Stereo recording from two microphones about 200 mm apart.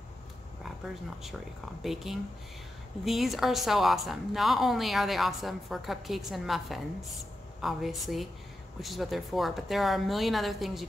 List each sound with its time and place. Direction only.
1.8 s a woman's voice: centre (ahead or behind)